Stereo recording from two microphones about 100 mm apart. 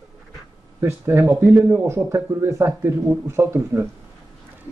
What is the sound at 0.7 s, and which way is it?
Speech, 25° right (ahead or behind).